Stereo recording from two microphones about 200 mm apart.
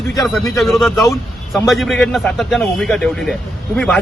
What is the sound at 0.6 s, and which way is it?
A man's voice, centre (ahead or behind).